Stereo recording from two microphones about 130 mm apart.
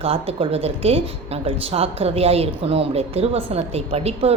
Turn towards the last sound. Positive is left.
turn(degrees=-50)  # may be behind; listen again after turning